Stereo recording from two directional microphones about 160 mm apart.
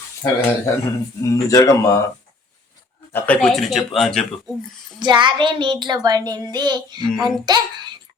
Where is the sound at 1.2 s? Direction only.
20° left (ahead or behind).